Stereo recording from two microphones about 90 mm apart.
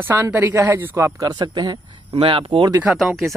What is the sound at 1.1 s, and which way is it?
Speech, 45° right (ahead or behind).